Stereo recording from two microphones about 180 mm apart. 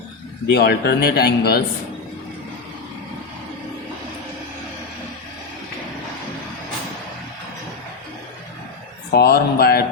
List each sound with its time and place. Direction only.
0.5 s a man's voice: 65° left (ahead or behind)
9.1 s a man's voice: 60° left (ahead or behind)